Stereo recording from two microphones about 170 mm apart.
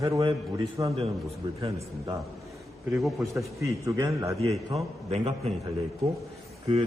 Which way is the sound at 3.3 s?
20° right (ahead or behind).